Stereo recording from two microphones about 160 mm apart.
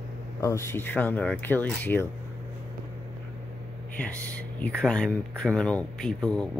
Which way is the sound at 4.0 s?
10° left (ahead or behind).